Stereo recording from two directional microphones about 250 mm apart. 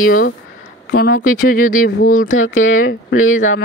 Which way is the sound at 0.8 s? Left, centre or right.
Left.